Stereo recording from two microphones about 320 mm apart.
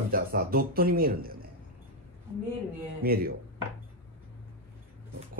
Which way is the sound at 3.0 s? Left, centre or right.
Right.